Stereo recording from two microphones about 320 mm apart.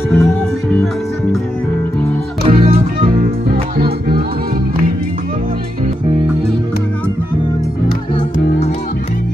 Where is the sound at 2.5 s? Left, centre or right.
Centre.